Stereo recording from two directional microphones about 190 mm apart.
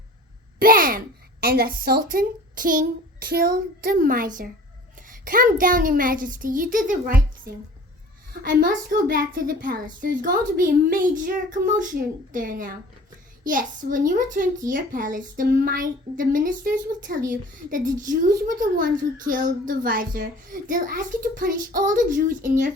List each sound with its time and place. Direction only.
0.6 s a child's voice: 50° right (ahead or behind)